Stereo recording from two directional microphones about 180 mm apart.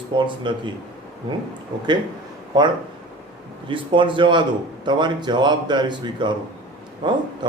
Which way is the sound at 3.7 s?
30° right (ahead or behind).